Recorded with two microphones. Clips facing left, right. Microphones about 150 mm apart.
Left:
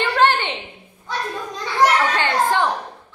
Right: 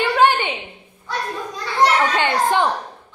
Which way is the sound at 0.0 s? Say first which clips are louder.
Right 1 dB; 10° right (ahead or behind).